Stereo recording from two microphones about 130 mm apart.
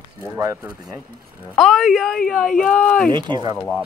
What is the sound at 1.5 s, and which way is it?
A woman's voice, centre (ahead or behind).